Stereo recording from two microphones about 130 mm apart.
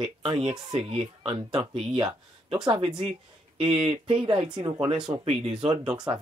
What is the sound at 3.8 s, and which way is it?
Speech, 45° right (ahead or behind).